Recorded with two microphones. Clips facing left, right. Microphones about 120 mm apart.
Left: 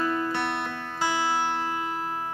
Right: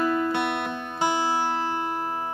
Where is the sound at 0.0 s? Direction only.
20° right (ahead or behind).